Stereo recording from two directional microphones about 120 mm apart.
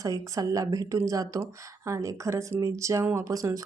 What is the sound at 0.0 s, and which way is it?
Speech, 30° right (ahead or behind).